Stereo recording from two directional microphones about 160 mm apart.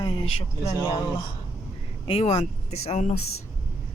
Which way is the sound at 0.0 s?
35° left (ahead or behind).